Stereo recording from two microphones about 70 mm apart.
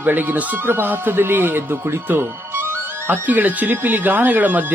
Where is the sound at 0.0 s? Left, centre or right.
Right.